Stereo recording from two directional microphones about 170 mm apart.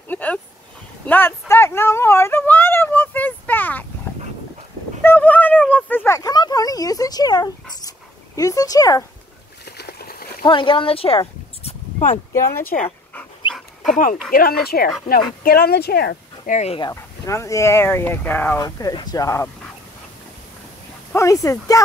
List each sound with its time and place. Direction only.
0.1 s a sound: 10° left (ahead or behind)
1.0 s speech: 10° left (ahead or behind)
1.5 s a sound: 15° left (ahead or behind)
5.0 s a sound: 10° left (ahead or behind)
8.4 s speech: 20° left (ahead or behind)
9.7 s a sound: 70° left (ahead or behind)
10.4 s speech: 30° left (ahead or behind)
13.4 s dog: 30° left (ahead or behind)
14.3 s speech: 60° left (ahead or behind)
16.5 s speech: 40° left (ahead or behind)
16.8 s speech: 15° left (ahead or behind)
18.6 s speech: 20° left (ahead or behind)
21.1 s speech: 20° left (ahead or behind)